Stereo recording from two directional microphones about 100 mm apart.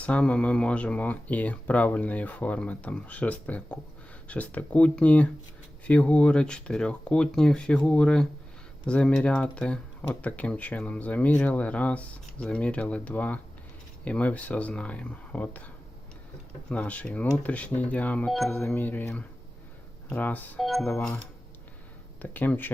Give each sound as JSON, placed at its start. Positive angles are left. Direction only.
{"t": 0.0, "sound": "speech", "side_deg": 10}
{"t": 18.3, "sound": "speech", "side_deg": 0}
{"t": 18.5, "sound": "speech", "side_deg": 15}
{"t": 20.6, "sound": "speech", "side_deg": 0}
{"t": 22.2, "sound": "speech", "side_deg": 15}